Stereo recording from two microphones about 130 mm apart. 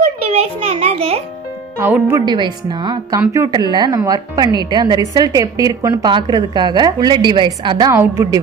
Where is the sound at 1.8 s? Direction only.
15° right (ahead or behind).